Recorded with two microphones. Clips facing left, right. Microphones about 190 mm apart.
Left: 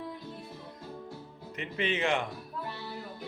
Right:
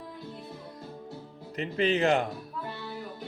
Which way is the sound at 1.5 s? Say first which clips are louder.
Right 6 dB; 35° right (ahead or behind).